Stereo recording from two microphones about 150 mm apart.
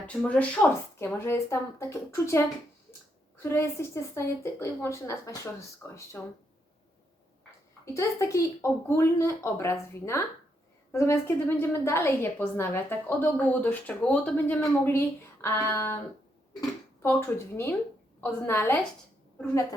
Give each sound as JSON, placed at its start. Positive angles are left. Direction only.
{"t": 0.1, "sound": "a woman's voice", "side_deg": 10}
{"t": 7.9, "sound": "a woman's voice", "side_deg": 20}
{"t": 17.0, "sound": "a woman's voice", "side_deg": 15}